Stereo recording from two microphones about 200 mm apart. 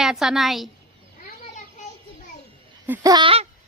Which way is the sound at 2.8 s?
20° right (ahead or behind).